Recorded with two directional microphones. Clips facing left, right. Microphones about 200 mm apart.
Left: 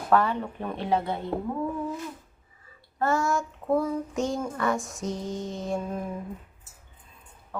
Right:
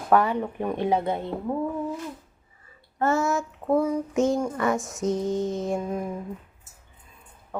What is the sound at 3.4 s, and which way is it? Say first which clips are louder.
Child singing: right 2 dB; 10° right (ahead or behind).